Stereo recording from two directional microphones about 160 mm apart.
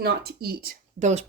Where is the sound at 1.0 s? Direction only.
45° right (ahead or behind).